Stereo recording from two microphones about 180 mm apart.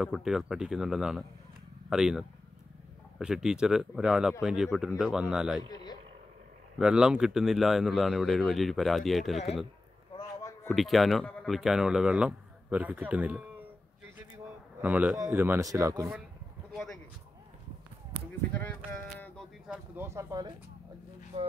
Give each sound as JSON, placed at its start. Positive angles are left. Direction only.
{"t": 0.0, "sound": "speech", "side_deg": -5}
{"t": 6.8, "sound": "speech", "side_deg": -5}
{"t": 10.1, "sound": "a sound", "side_deg": 15}
{"t": 10.7, "sound": "speech", "side_deg": 0}
{"t": 14.8, "sound": "speech", "side_deg": -10}
{"t": 16.7, "sound": "a sound", "side_deg": 0}
{"t": 18.5, "sound": "sheep", "side_deg": 10}
{"t": 19.7, "sound": "bird", "side_deg": -15}
{"t": 21.3, "sound": "rub", "side_deg": -30}